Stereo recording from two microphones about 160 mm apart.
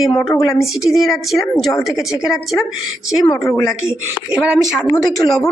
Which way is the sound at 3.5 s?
15° left (ahead or behind).